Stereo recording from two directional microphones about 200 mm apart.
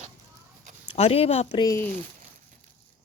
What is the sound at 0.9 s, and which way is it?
Speech, 30° left (ahead or behind).